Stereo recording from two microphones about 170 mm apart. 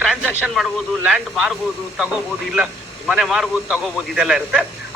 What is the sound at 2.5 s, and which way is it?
Speech, 5° right (ahead or behind).